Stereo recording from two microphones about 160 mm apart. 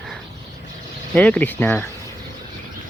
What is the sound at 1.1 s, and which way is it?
Speech, 10° left (ahead or behind).